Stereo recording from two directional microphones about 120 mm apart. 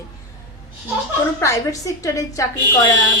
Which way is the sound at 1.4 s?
25° left (ahead or behind).